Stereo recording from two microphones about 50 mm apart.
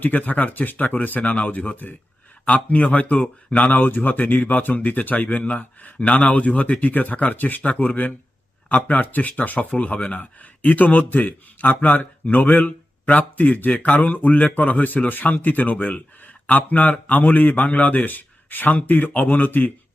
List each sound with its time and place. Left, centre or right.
0.0 s speech: left